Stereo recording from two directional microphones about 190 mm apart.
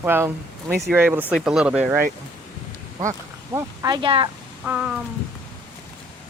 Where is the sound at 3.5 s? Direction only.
20° right (ahead or behind).